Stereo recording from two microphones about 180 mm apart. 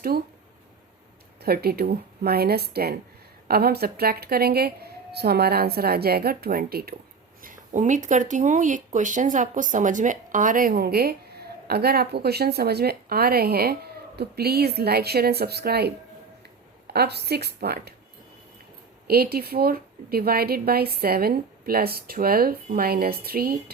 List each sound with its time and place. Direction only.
1.4 s a woman's voice: 60° right (ahead or behind)
7.4 s a woman's voice: 45° right (ahead or behind); by 17.9 s 65° right (ahead or behind)
19.0 s a woman's voice: 60° right (ahead or behind)